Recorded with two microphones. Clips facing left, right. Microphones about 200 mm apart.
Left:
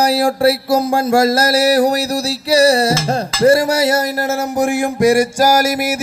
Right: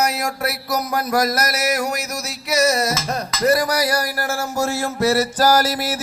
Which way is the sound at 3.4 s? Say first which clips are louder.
Left 6 dB; 30° left (ahead or behind).